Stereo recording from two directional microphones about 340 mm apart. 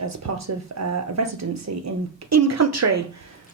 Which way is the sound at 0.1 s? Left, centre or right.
Right.